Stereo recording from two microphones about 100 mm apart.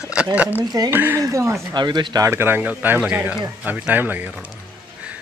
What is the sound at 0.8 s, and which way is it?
Speech, 25° right (ahead or behind).